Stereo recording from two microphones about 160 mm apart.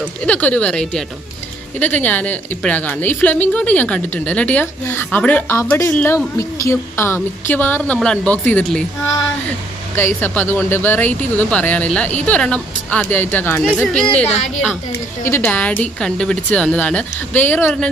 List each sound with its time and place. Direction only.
0.2 s a woman's voice: 10° left (ahead or behind)
9.9 s a woman's voice: 15° left (ahead or behind)